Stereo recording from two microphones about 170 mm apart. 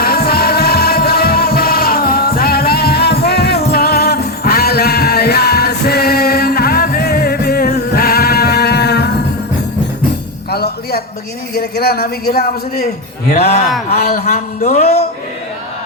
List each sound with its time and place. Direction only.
0.0 s music: 65° left (ahead or behind)
10.5 s a sound: 70° left (ahead or behind)
11.5 s a man's voice: 65° left (ahead or behind)
14.3 s a man's voice: 45° left (ahead or behind)